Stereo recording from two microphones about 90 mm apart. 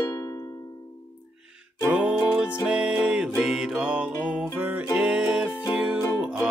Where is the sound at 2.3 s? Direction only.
15° right (ahead or behind).